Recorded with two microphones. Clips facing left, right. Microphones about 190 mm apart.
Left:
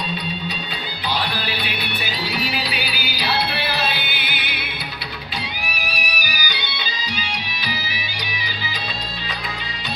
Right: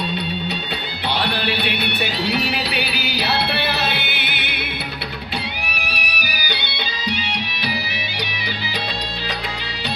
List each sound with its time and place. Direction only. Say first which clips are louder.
1.1 s music: right 4 dB; 65° right (ahead or behind)
5.7 s music: even; 65° right (ahead or behind)